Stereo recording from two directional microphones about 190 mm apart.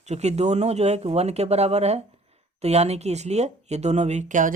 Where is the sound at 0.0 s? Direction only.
35° right (ahead or behind).